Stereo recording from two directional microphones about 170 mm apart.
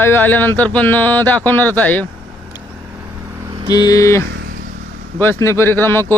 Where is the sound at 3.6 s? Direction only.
25° left (ahead or behind).